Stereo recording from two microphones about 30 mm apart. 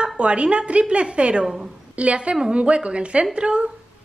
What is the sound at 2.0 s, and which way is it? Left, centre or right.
A woman's voice, right.